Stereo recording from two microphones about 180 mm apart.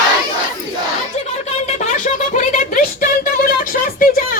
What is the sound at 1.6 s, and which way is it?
Music, 40° left (ahead or behind).